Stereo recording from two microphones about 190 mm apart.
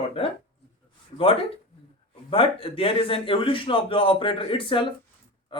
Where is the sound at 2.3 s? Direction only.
30° left (ahead or behind).